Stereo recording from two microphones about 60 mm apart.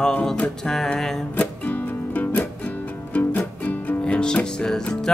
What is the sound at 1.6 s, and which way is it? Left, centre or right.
Music, left.